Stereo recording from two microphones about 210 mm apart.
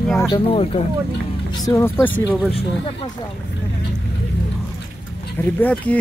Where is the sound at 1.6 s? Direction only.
15° left (ahead or behind).